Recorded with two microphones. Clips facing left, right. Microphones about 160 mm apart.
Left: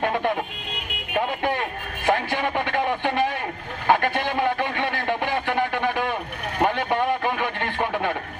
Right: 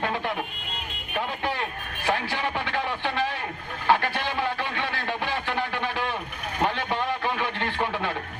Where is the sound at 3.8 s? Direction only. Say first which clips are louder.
Left 3 dB; 50° left (ahead or behind).